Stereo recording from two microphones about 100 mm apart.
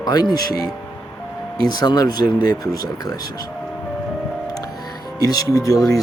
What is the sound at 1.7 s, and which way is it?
Speech, 40° left (ahead or behind).